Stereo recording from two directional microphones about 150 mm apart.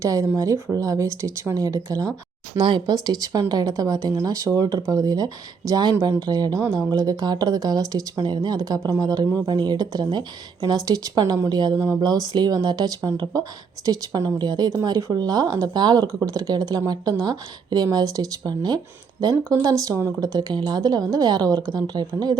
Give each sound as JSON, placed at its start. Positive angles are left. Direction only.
{"t": 0.0, "sound": "speech", "side_deg": -20}